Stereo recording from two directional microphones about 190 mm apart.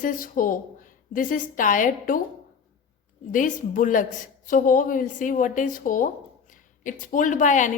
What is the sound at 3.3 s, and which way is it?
A woman's voice, 45° left (ahead or behind).